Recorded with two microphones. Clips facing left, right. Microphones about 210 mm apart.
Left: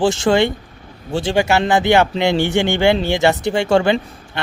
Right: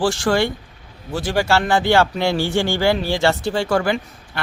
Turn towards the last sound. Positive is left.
turn(degrees=25)  # may be behind; listen again after turning